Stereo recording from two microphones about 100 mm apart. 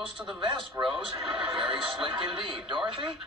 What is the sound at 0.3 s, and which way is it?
A man's voice, 55° right (ahead or behind).